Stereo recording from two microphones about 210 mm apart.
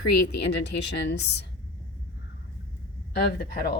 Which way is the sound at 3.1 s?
50° left (ahead or behind).